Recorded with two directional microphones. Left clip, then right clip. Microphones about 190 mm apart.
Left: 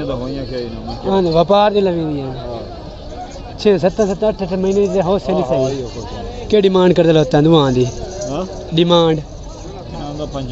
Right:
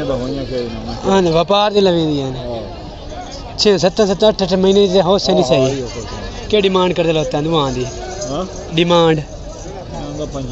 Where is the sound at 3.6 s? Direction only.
Centre (ahead or behind).